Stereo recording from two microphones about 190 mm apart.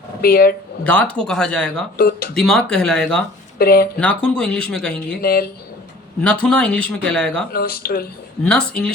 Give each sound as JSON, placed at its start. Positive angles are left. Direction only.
{"t": 0.2, "sound": "speech", "side_deg": 50}
{"t": 0.9, "sound": "speech", "side_deg": 5}
{"t": 2.0, "sound": "speech", "side_deg": 50}
{"t": 2.3, "sound": "speech", "side_deg": 5}
{"t": 3.6, "sound": "speech", "side_deg": 50}
{"t": 3.9, "sound": "speech", "side_deg": 5}
{"t": 5.2, "sound": "speech", "side_deg": 55}
{"t": 6.2, "sound": "speech", "side_deg": 5}
{"t": 7.5, "sound": "speech", "side_deg": 50}
{"t": 8.4, "sound": "speech", "side_deg": 5}